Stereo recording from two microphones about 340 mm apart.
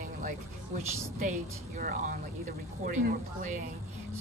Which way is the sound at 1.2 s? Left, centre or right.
Right.